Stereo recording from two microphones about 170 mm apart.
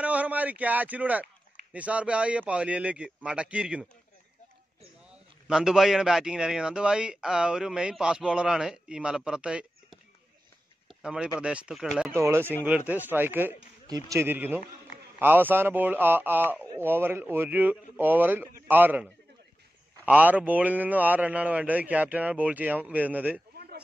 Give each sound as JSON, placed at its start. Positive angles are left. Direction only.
{"t": 0.0, "sound": "a man's voice", "side_deg": -10}
{"t": 5.5, "sound": "a man's voice", "side_deg": -5}
{"t": 10.9, "sound": "a sound", "side_deg": -5}
{"t": 11.4, "sound": "a man's voice", "side_deg": -5}
{"t": 12.1, "sound": "a man's voice", "side_deg": -15}
{"t": 20.1, "sound": "a man's voice", "side_deg": -10}